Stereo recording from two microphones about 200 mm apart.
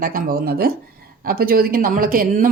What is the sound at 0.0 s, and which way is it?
Speech, 45° right (ahead or behind).